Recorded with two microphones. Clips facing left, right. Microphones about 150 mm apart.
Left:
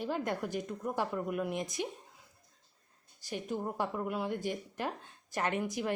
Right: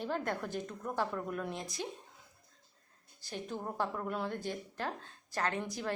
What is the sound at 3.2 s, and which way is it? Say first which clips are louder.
A woman's voice: left 4 dB; 15° left (ahead or behind).